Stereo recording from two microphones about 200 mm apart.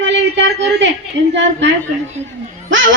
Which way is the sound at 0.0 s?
65° right (ahead or behind).